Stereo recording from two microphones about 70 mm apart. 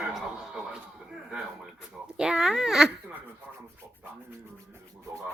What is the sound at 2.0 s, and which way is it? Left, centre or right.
Speech, centre.